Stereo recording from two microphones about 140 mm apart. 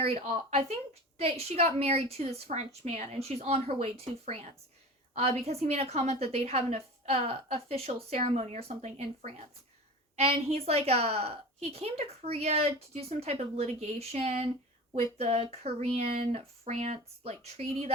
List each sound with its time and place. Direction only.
0.0 s a woman's voice: 50° right (ahead or behind)